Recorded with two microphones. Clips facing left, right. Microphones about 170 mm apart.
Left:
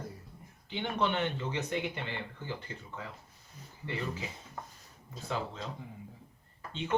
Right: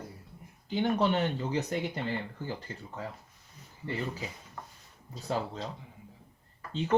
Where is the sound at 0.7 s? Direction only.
40° right (ahead or behind).